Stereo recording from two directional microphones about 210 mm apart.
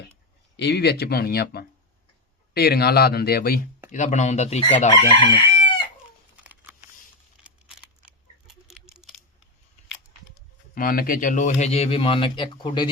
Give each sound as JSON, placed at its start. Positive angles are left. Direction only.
{"t": 0.5, "sound": "speech", "side_deg": 55}
{"t": 3.9, "sound": "speech", "side_deg": 35}
{"t": 5.0, "sound": "chicken", "side_deg": 25}
{"t": 8.6, "sound": "patter", "side_deg": 0}
{"t": 10.8, "sound": "speech", "side_deg": 45}